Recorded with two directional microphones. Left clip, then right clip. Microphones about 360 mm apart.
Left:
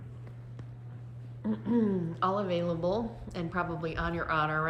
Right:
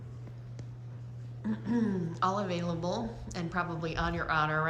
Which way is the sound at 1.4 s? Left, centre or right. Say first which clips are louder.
Left 3 dB; centre.